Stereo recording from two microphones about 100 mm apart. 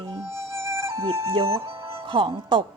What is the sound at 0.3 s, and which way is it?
Music, 25° right (ahead or behind).